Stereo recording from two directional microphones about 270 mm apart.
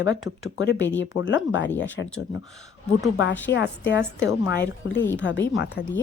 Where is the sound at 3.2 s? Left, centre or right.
Left.